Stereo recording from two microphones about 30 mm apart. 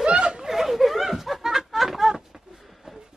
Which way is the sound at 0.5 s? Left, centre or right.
Centre.